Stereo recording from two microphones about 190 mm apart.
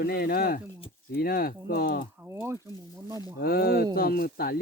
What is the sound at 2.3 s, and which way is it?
Speech, 15° right (ahead or behind).